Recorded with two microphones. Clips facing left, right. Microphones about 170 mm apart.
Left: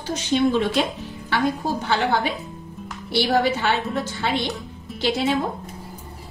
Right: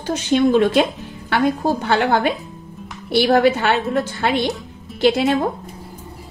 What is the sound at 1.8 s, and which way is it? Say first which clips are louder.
A woman's voice: right 4 dB; 55° right (ahead or behind).